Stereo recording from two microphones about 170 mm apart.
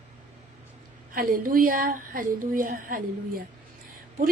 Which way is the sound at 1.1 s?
55° right (ahead or behind).